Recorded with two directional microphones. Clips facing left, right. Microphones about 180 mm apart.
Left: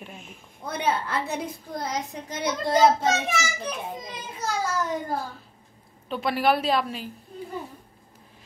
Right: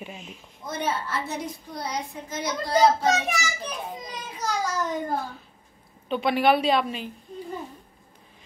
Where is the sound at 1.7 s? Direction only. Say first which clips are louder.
Left 2 dB; 45° left (ahead or behind).